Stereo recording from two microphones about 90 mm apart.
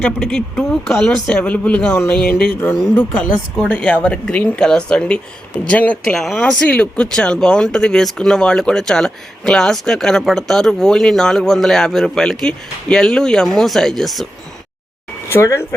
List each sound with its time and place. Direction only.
0.2 s speech: 5° left (ahead or behind)
1.4 s speech: 15° left (ahead or behind)
1.9 s speech: 25° left (ahead or behind)
6.1 s speech: centre (ahead or behind)
6.4 s speech: 10° left (ahead or behind)
15.3 s speech: 30° left (ahead or behind)